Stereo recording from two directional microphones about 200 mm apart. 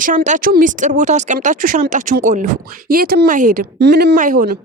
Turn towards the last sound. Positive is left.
turn(degrees=-40)  # may be behind; listen again after turning